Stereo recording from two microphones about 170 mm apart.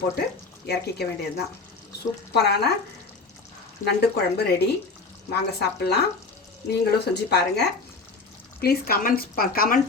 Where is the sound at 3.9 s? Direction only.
75° left (ahead or behind).